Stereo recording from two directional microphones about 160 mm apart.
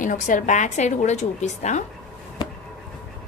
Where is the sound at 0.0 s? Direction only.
55° left (ahead or behind).